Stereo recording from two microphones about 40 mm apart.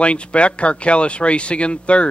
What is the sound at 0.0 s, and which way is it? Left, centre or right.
Speech, left.